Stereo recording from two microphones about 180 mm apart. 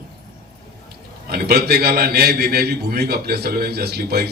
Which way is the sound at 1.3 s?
60° right (ahead or behind).